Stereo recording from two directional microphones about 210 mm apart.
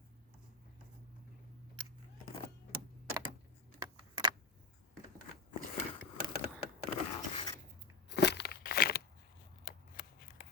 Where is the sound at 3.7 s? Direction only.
20° right (ahead or behind).